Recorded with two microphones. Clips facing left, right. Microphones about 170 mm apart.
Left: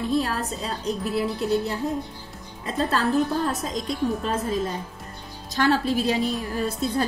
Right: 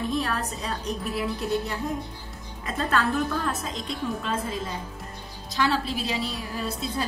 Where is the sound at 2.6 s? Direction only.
35° left (ahead or behind).